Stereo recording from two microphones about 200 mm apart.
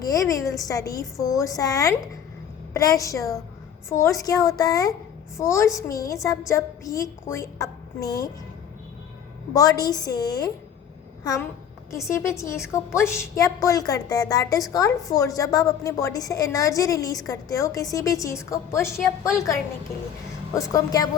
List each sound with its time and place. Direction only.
0.0 s a woman's voice: 15° left (ahead or behind)
9.5 s a woman's voice: 15° left (ahead or behind)
11.9 s a woman's voice: 15° left (ahead or behind)
20.5 s a woman's voice: 15° left (ahead or behind)